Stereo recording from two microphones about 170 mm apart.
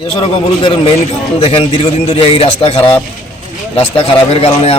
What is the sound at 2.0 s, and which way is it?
Speech, 35° left (ahead or behind).